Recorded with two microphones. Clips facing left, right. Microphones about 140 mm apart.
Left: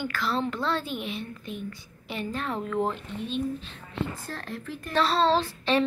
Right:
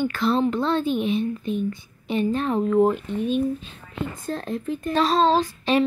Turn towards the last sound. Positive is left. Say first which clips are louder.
# right 4 dB
turn(degrees=-15)  # may be behind; listen again after turning